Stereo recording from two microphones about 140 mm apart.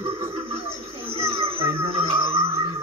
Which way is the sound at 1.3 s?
40° right (ahead or behind).